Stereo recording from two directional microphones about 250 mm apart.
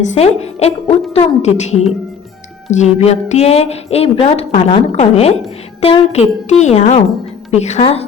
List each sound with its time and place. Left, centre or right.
0.1 s a woman's voice: left